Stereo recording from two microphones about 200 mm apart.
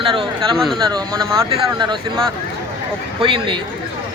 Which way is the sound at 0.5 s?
Centre (ahead or behind).